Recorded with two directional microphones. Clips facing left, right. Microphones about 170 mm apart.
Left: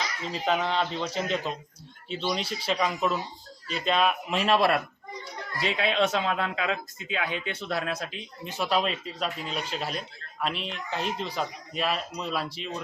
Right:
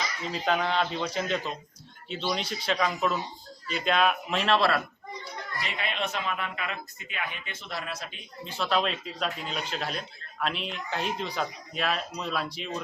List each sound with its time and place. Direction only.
0.4 s speech: centre (ahead or behind)
5.6 s a man's voice: 90° left; by 7.9 s 60° left (ahead or behind)
8.4 s speech: 15° left (ahead or behind)